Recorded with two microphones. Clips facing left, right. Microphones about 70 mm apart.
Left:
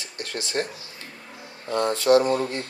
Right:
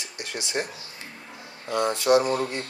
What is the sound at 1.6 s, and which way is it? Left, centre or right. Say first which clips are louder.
Speech: left 2 dB; centre.